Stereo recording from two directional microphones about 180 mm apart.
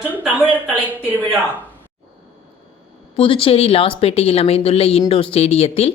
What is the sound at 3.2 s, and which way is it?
A woman's voice, 30° left (ahead or behind).